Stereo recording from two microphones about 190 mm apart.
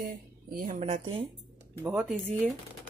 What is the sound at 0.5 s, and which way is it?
Speech, 45° right (ahead or behind).